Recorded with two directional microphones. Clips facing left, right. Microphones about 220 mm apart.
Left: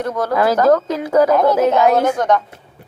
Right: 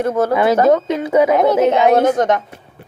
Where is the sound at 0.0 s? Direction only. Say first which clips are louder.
Right 4 dB; 25° right (ahead or behind).